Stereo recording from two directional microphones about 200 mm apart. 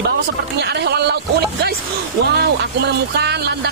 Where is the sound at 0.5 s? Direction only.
55° right (ahead or behind).